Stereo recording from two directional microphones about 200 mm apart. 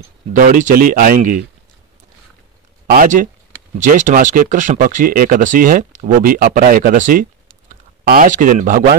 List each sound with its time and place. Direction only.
0.3 s speech: 40° right (ahead or behind)
2.9 s speech: 45° right (ahead or behind)